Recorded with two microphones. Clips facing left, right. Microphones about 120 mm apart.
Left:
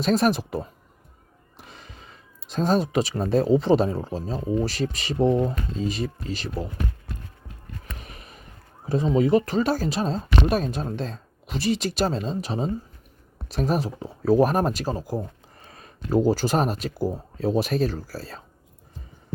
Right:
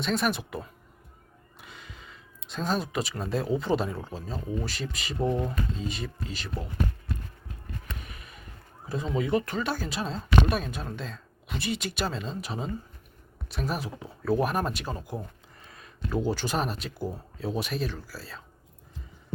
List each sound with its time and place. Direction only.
0.0 s speech: 40° left (ahead or behind)
1.6 s speech: 40° left (ahead or behind)
5.2 s speech: 25° left (ahead or behind)
5.7 s speech: 40° left (ahead or behind)
7.9 s a sound: 35° left (ahead or behind)
8.9 s speech: 35° left (ahead or behind)